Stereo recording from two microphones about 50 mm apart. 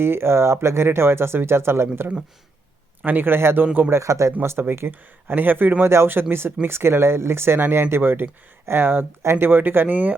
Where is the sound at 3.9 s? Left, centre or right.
Right.